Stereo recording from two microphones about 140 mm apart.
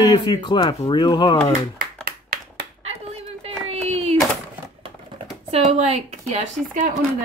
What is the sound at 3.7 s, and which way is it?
Hands, 45° right (ahead or behind).